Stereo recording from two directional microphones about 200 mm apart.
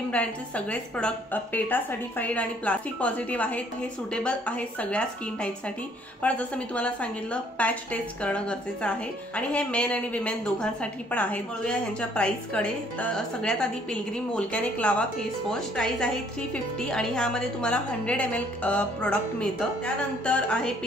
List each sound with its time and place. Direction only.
0.1 s a woman's voice: 5° left (ahead or behind)